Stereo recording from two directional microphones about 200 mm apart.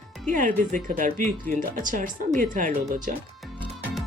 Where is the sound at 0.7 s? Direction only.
40° right (ahead or behind).